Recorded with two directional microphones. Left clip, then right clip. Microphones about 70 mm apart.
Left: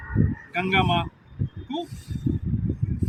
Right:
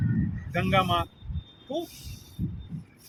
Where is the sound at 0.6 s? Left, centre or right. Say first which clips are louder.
Left 2 dB; right.